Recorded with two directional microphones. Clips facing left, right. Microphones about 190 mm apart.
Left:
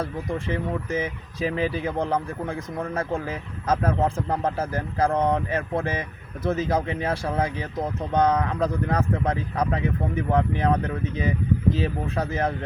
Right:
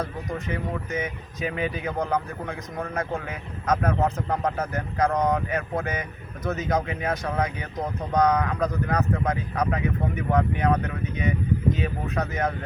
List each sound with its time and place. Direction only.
0.0 s speech: 30° left (ahead or behind)